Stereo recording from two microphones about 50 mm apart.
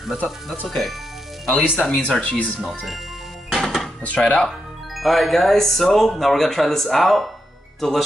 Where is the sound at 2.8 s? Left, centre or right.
Centre.